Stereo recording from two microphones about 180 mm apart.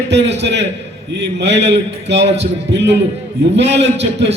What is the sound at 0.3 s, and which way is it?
A man's voice, 70° right (ahead or behind).